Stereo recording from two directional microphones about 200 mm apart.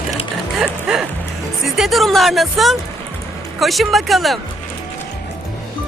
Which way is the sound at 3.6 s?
Centre (ahead or behind).